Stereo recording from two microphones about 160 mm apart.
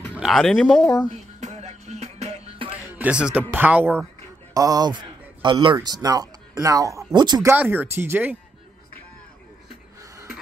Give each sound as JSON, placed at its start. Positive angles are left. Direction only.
{"t": 0.1, "sound": "speech", "side_deg": 0}
{"t": 1.1, "sound": "music", "side_deg": -45}
{"t": 3.0, "sound": "speech", "side_deg": -5}
{"t": 4.6, "sound": "a man's voice", "side_deg": -25}
{"t": 7.5, "sound": "speech", "side_deg": -10}